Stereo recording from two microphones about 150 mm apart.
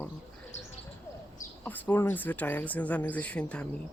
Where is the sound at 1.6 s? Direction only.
10° left (ahead or behind).